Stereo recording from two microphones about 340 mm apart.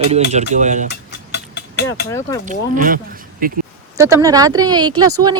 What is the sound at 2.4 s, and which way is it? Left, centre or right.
Speech, right.